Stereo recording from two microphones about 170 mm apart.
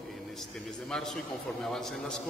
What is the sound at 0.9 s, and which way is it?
A man's voice, 5° left (ahead or behind).